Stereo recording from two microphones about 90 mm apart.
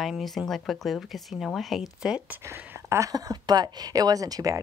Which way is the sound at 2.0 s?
10° right (ahead or behind).